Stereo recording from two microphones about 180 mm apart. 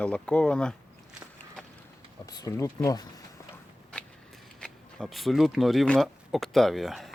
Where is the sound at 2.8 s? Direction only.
20° left (ahead or behind).